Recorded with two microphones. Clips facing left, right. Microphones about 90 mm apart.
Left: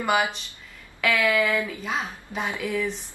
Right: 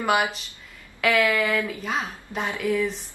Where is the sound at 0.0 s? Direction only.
Centre (ahead or behind).